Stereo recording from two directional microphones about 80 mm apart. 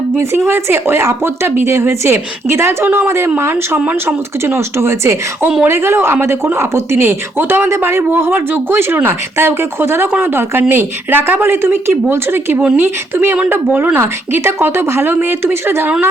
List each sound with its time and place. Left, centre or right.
0.2 s a woman's voice: right